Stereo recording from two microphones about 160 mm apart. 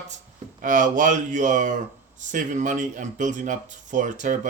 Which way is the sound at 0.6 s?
55° right (ahead or behind).